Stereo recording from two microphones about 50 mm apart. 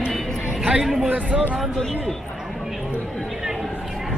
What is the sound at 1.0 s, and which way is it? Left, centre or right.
Speech, right.